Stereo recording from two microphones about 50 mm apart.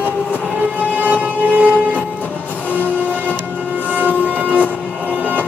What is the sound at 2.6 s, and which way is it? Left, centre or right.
Train, right.